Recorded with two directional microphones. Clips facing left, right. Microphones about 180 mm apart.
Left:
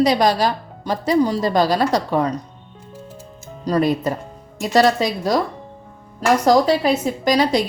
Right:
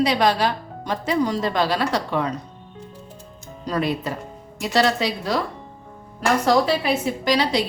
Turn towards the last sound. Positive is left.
turn(degrees=45)  # may be behind; listen again after turning